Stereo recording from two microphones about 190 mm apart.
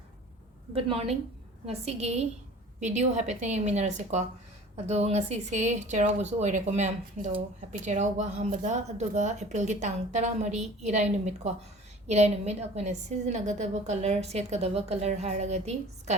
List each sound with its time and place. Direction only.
0.7 s a woman's voice: 30° right (ahead or behind)